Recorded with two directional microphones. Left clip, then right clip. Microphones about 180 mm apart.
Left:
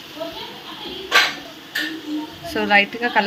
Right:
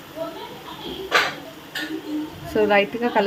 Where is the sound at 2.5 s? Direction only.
20° right (ahead or behind).